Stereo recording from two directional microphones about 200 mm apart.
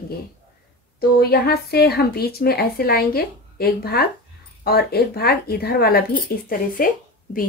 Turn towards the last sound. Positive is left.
turn(degrees=45)  # may be behind; listen again after turning